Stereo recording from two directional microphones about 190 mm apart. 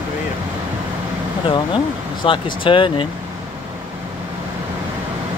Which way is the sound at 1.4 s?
25° left (ahead or behind).